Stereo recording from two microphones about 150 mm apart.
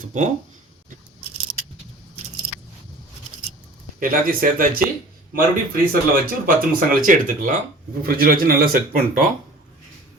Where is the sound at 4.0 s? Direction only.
65° right (ahead or behind).